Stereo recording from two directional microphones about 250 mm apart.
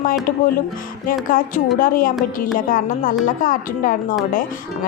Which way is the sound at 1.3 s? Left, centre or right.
Left.